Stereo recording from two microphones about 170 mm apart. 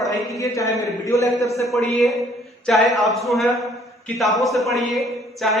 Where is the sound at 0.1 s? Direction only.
20° left (ahead or behind).